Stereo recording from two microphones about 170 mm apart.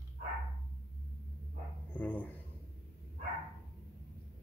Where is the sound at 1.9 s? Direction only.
10° left (ahead or behind).